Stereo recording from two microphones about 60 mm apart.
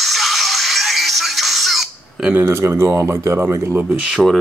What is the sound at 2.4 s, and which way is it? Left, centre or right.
Speech, right.